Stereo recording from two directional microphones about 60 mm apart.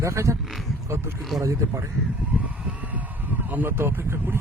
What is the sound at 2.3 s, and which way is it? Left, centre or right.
Vehicle, right.